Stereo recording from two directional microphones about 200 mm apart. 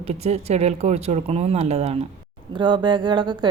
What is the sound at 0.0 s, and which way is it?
A woman's voice, 30° right (ahead or behind).